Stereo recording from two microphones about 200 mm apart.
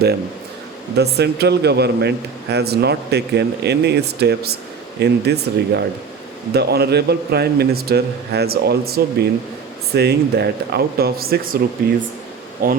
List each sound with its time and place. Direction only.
0.9 s a man's voice: 55° right (ahead or behind)
12.6 s a man's voice: 45° right (ahead or behind)